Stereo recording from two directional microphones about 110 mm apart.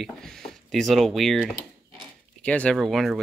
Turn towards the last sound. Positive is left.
turn(degrees=0)  # may be behind; listen again after turning